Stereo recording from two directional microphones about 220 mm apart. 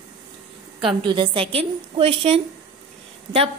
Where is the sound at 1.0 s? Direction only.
20° right (ahead or behind).